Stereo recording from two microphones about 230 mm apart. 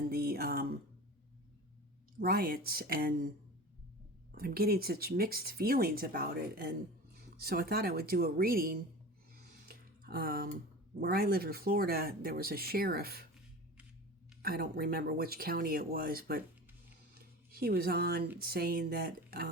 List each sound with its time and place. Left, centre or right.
0.1 s a sound: right
2.2 s speech: right
4.3 s speech: right
9.3 s a sound: right
11.0 s speech: right
14.4 s speech: right
17.5 s speech: right